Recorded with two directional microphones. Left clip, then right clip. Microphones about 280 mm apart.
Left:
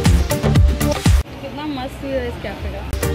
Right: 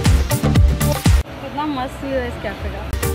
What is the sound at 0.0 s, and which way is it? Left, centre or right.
Music, centre.